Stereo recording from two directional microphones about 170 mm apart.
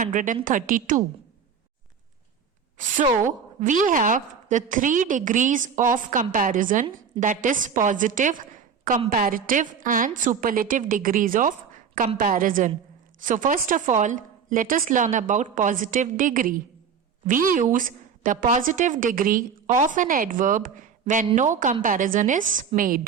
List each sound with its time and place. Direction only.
0.0 s a woman's voice: 50° right (ahead or behind)
2.7 s a woman's voice: 50° right (ahead or behind)